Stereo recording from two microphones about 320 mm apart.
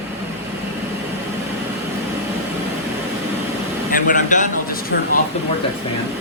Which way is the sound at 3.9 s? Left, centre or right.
Left.